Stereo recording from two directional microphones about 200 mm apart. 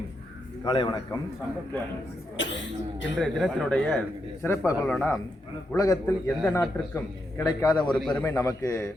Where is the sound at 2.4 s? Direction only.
65° left (ahead or behind).